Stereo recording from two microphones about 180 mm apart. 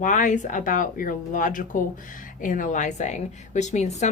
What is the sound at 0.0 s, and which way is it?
Speech, 45° left (ahead or behind).